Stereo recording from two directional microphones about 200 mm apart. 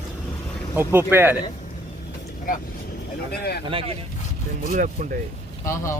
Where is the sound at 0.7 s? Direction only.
10° right (ahead or behind).